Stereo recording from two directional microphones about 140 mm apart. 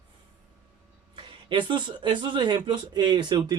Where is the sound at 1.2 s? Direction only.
35° right (ahead or behind).